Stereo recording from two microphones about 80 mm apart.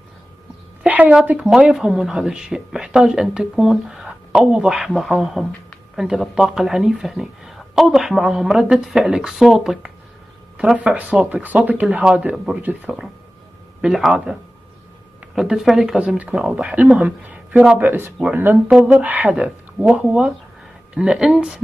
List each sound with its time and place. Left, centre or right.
0.8 s a sound: centre
1.6 s speech: centre
13.7 s speech: centre
15.3 s speech: centre
16.0 s speech: centre
17.8 s speech: right; by 21.5 s centre